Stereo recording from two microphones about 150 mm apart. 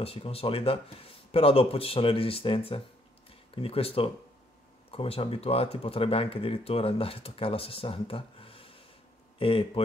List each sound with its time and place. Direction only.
0.0 s speech: 40° left (ahead or behind)